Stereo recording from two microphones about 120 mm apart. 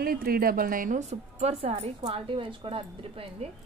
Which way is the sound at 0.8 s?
75° right (ahead or behind).